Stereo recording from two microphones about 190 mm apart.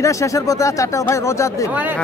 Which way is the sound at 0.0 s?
15° left (ahead or behind).